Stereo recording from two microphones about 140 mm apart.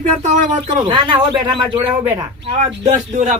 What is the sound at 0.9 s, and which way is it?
Speech, 40° right (ahead or behind).